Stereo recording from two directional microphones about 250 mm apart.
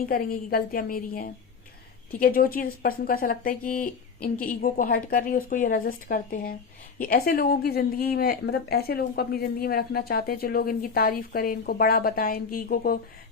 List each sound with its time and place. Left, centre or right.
0.0 s a woman's voice: left